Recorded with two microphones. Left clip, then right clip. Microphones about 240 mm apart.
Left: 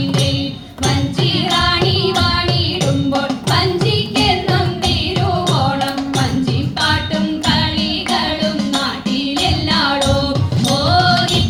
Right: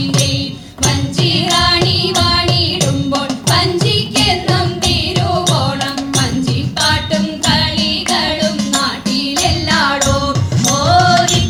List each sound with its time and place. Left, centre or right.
0.9 s music: right
6.8 s music: right